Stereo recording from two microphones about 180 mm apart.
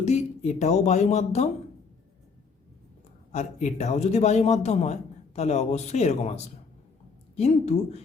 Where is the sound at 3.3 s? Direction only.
40° left (ahead or behind).